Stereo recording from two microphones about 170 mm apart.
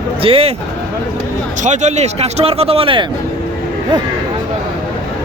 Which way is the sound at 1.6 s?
45° right (ahead or behind).